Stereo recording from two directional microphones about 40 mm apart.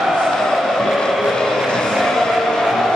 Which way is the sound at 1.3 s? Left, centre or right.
Centre.